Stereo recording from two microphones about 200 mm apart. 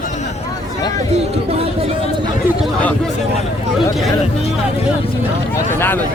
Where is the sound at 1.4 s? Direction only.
30° right (ahead or behind).